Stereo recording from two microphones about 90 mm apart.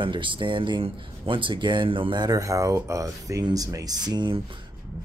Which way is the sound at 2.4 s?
40° right (ahead or behind).